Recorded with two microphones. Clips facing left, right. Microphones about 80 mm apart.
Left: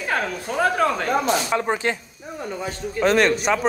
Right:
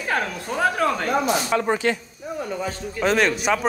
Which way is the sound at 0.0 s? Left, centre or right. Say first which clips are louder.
Even; centre.